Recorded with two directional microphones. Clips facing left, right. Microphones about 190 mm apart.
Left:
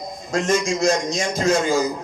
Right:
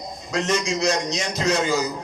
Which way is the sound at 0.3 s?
50° left (ahead or behind).